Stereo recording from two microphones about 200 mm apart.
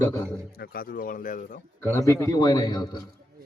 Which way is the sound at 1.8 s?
15° left (ahead or behind).